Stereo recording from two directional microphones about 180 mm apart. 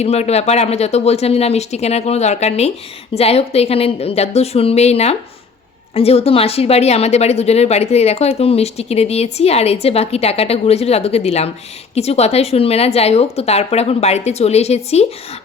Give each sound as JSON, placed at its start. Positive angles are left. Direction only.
{"t": 0.0, "sound": "a woman's voice", "side_deg": 35}